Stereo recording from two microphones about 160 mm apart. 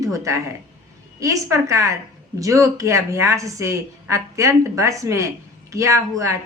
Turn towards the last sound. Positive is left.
turn(degrees=-20)  # may be behind; listen again after turning